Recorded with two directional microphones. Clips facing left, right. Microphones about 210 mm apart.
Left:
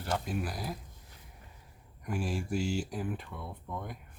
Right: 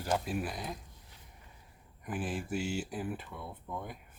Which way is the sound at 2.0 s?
5° right (ahead or behind).